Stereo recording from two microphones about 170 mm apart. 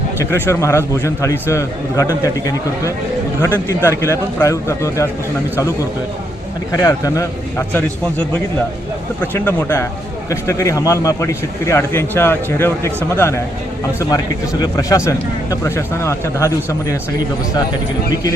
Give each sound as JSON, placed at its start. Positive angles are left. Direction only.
{"t": 0.4, "sound": "speech", "side_deg": 15}
{"t": 3.4, "sound": "speech", "side_deg": 15}
{"t": 6.7, "sound": "a man's voice", "side_deg": 20}
{"t": 9.2, "sound": "speech", "side_deg": 10}
{"t": 14.6, "sound": "speech", "side_deg": 20}